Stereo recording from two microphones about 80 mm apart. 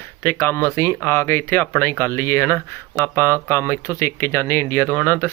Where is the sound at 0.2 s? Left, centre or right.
Left.